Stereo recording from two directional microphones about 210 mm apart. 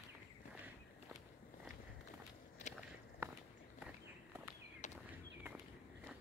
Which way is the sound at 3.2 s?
15° right (ahead or behind).